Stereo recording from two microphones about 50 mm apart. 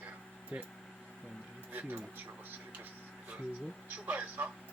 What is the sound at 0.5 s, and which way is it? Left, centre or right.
Speech, right.